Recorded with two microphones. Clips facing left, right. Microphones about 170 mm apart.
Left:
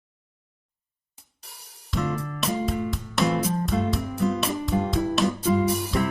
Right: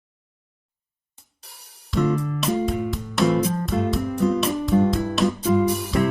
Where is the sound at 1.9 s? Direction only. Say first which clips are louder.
Right 6 dB; centre (ahead or behind).